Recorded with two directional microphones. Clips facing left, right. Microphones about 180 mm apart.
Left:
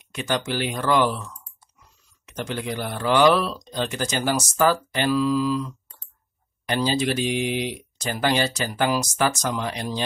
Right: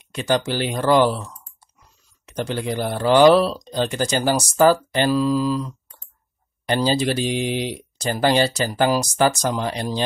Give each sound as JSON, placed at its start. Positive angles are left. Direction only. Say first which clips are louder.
{"t": 0.0, "sound": "speech", "louder": "right 5 dB", "side_deg": -35}